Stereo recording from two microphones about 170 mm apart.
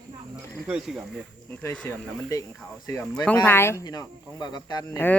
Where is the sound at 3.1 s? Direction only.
5° left (ahead or behind); by 5.0 s 25° left (ahead or behind).